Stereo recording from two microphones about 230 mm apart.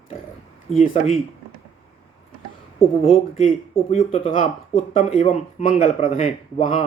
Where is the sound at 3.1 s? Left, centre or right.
Left.